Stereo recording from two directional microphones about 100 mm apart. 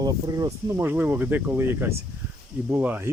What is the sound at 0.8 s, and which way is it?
Speech, 20° right (ahead or behind).